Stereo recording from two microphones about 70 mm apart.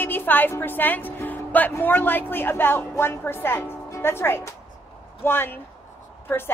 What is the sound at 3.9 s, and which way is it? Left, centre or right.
Speech, left.